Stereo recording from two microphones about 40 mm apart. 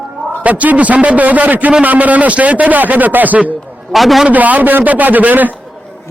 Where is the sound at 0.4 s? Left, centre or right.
Right.